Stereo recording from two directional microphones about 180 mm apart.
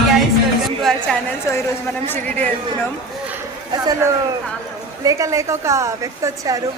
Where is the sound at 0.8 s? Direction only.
Centre (ahead or behind).